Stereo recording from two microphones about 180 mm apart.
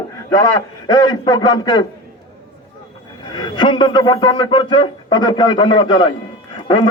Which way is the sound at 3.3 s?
25° left (ahead or behind).